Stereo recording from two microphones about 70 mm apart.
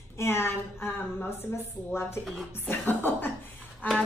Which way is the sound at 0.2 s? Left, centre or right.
Left.